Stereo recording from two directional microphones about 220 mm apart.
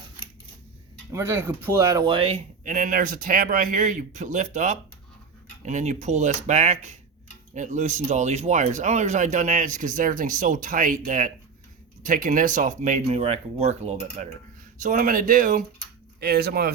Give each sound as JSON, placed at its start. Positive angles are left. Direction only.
{"t": 1.1, "sound": "speech", "side_deg": -10}